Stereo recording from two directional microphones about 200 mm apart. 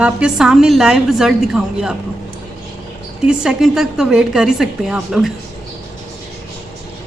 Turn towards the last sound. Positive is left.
turn(degrees=-5)  # may be behind; listen again after turning